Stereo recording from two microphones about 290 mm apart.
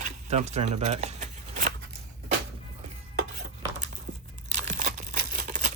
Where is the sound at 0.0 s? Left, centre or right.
Right.